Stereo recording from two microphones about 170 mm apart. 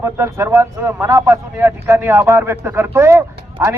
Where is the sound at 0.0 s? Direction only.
15° right (ahead or behind).